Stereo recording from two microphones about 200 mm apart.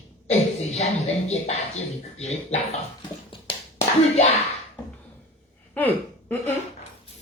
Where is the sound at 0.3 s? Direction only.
35° left (ahead or behind).